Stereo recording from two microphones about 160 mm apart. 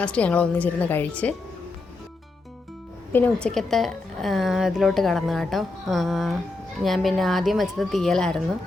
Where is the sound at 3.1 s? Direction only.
10° left (ahead or behind).